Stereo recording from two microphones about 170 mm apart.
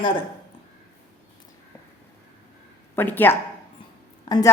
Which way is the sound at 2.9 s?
10° left (ahead or behind).